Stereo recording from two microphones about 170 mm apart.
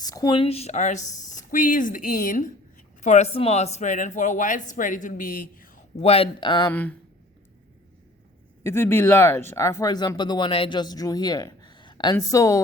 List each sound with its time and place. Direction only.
0.0 s speech: 20° left (ahead or behind); by 5.8 s 55° left (ahead or behind)
6.0 s speech: 35° left (ahead or behind)
6.7 s speech: 10° left (ahead or behind)
8.6 s speech: 15° left (ahead or behind)